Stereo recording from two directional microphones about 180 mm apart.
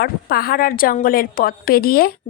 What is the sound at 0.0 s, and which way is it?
A woman's voice, 55° left (ahead or behind).